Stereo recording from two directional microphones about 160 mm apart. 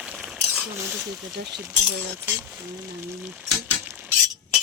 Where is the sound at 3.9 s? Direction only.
10° right (ahead or behind).